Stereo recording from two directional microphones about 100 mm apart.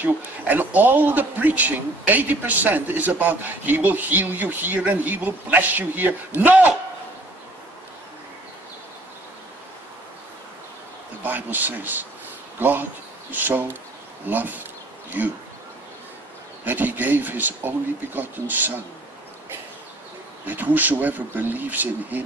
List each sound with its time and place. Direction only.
0.0 s a man's voice: 20° right (ahead or behind)
11.2 s a man's voice: 20° right (ahead or behind)
16.6 s speech: 20° right (ahead or behind)
20.4 s a man's voice: 20° right (ahead or behind)